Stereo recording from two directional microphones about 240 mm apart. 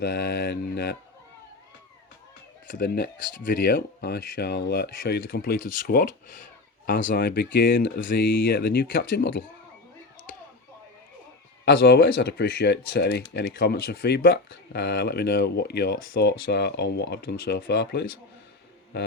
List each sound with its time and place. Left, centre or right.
0.0 s speech: left
2.6 s speech: left
11.6 s speech: left